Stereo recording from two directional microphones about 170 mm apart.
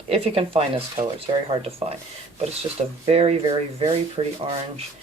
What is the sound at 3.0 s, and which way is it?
Speech, 35° right (ahead or behind).